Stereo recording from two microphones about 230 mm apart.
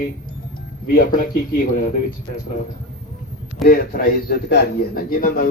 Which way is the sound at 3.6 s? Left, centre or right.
Left.